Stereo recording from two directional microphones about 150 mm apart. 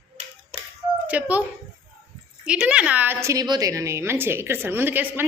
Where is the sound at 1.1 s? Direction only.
10° right (ahead or behind).